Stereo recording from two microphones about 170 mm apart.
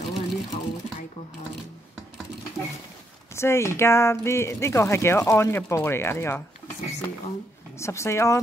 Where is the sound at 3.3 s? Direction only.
15° left (ahead or behind).